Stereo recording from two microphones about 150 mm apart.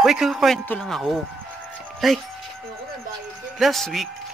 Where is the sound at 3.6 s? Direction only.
Centre (ahead or behind).